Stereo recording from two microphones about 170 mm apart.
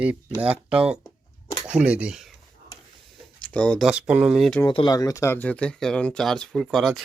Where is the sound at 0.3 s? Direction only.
5° right (ahead or behind).